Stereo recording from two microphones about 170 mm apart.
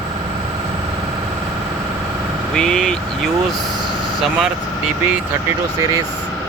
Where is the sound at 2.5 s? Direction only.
5° left (ahead or behind).